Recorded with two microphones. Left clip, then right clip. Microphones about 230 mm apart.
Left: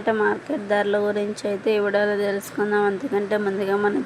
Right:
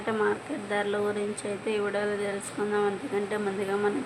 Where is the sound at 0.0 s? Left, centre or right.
Centre.